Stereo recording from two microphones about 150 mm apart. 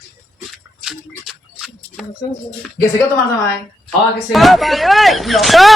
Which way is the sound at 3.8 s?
Centre (ahead or behind).